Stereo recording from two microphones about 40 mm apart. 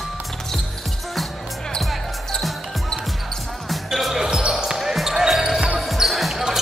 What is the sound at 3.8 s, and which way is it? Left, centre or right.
Basketball bounce, centre.